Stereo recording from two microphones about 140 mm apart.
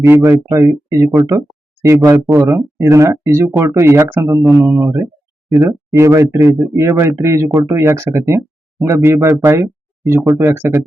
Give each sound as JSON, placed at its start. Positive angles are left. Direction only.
{"t": 0.0, "sound": "speech", "side_deg": -20}